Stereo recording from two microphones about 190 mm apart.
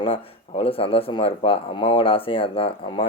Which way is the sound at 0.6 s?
30° left (ahead or behind).